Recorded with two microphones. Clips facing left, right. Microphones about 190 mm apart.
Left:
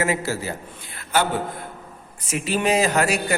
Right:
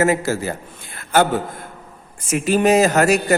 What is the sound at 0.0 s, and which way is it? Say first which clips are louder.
Speech: right 6 dB; 45° right (ahead or behind).